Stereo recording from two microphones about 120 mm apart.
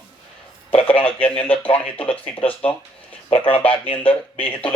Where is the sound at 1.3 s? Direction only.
50° left (ahead or behind).